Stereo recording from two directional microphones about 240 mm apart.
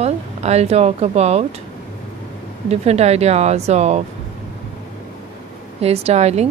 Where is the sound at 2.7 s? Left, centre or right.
Right.